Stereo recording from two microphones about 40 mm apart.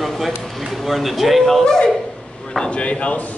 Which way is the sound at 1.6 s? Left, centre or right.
Left.